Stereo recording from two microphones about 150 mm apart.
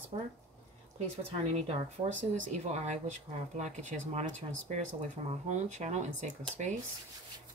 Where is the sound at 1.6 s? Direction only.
45° right (ahead or behind).